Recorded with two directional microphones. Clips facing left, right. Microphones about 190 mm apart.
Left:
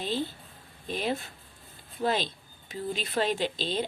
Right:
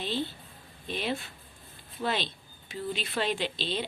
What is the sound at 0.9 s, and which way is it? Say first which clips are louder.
Speech: left 2 dB; 45° left (ahead or behind).